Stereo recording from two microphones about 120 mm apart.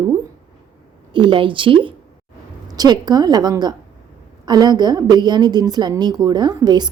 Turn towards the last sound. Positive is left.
turn(degrees=-35)  # may be behind; listen again after turning